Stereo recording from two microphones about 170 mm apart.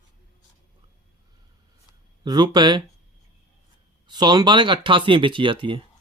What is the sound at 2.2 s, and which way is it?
Speech, 25° right (ahead or behind).